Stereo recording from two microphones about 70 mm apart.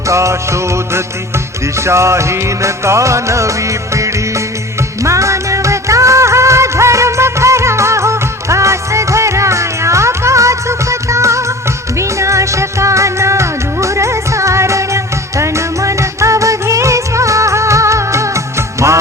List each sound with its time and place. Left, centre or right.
0.1 s music: right
5.0 s music: right